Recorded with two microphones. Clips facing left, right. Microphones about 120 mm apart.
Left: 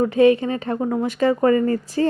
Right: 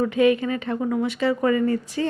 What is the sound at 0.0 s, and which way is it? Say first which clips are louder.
Speech: left 4 dB; 35° left (ahead or behind).